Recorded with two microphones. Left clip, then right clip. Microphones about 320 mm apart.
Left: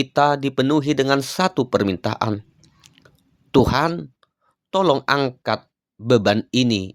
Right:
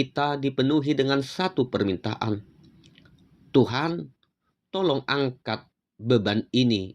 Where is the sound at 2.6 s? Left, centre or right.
Left.